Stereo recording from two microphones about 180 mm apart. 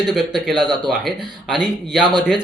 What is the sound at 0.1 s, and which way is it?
Speech, centre (ahead or behind).